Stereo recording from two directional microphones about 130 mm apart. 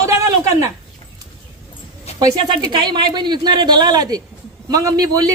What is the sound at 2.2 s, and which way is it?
A man's voice, 30° right (ahead or behind).